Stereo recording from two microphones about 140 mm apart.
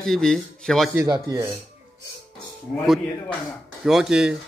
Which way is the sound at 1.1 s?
25° right (ahead or behind).